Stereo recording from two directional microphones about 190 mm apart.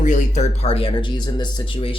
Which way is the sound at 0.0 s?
40° left (ahead or behind).